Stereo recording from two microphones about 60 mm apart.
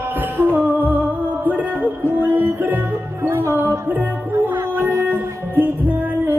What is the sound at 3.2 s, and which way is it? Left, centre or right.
Music, right.